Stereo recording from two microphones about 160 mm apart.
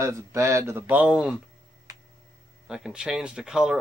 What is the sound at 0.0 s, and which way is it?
Speech, 20° right (ahead or behind).